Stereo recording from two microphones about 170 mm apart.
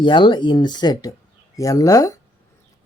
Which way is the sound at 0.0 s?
30° left (ahead or behind).